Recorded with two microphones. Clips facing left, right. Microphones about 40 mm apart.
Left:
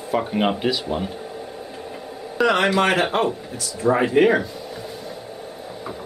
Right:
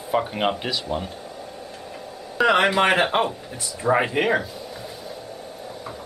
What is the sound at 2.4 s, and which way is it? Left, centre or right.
Speech, centre.